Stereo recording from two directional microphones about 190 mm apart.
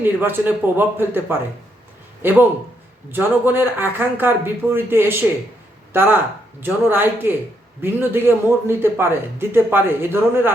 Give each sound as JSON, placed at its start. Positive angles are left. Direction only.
{"t": 0.0, "sound": "a man's voice", "side_deg": -10}